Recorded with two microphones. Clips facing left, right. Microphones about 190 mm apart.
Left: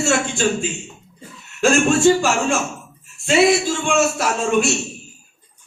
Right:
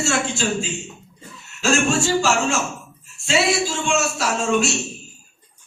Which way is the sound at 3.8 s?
55° left (ahead or behind).